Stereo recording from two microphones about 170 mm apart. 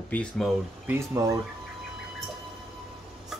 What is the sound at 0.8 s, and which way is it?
Speech, 15° right (ahead or behind).